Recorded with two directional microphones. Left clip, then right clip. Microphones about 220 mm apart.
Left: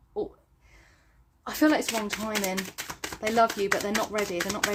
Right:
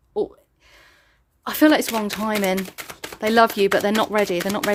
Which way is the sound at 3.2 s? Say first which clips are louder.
Right 7 dB; 50° right (ahead or behind).